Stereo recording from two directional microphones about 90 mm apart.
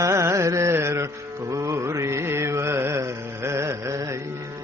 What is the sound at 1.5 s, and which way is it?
Mantra, 35° right (ahead or behind).